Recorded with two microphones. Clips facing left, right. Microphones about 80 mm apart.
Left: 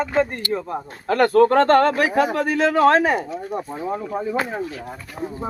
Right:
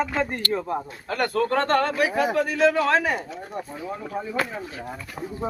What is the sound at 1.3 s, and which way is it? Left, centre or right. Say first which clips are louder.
Speech: left 8 dB; left.